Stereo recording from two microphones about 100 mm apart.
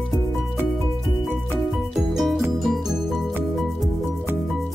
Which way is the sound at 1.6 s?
Centre (ahead or behind).